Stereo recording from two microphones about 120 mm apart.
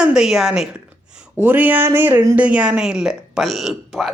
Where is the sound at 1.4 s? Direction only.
15° right (ahead or behind).